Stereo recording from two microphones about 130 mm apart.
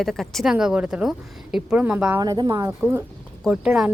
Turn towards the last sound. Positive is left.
turn(degrees=-5)  # may be behind; listen again after turning